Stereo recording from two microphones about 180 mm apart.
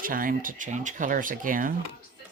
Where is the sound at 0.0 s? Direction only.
50° right (ahead or behind).